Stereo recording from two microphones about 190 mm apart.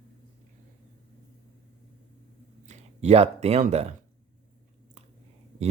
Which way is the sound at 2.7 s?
35° right (ahead or behind).